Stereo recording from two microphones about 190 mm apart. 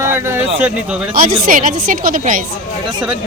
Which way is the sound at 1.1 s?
50° right (ahead or behind).